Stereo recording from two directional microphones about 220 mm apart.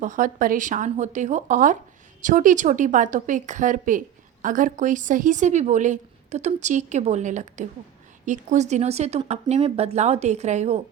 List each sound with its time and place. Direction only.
0.0 s a woman's voice: 35° right (ahead or behind)